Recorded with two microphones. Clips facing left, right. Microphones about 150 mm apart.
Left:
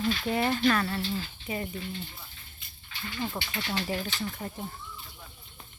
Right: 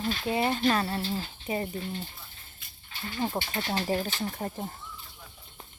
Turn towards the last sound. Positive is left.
turn(degrees=-40)  # may be behind; listen again after turning